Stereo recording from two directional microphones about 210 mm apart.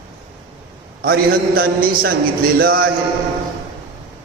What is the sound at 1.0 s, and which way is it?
A man's voice, 45° right (ahead or behind).